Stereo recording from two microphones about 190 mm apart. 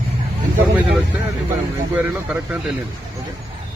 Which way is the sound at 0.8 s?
5° right (ahead or behind).